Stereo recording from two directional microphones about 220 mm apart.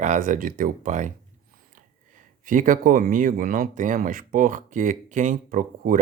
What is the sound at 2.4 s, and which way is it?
Speech, 35° right (ahead or behind).